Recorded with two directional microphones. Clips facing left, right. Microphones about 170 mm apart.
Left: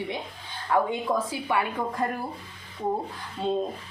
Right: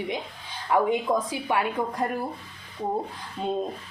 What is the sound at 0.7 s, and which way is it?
A woman's voice, 15° right (ahead or behind).